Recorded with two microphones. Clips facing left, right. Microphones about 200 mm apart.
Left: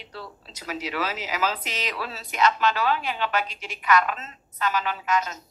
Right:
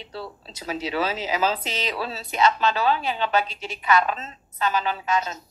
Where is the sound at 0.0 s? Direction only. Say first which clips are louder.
Right 4 dB; 30° right (ahead or behind).